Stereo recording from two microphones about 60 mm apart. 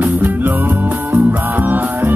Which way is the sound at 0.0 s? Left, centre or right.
Right.